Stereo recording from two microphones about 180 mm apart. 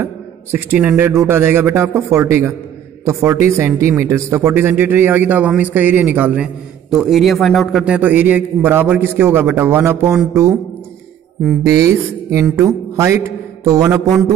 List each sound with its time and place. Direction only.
0.0 s speech: 10° right (ahead or behind)
11.6 s speech: 15° right (ahead or behind)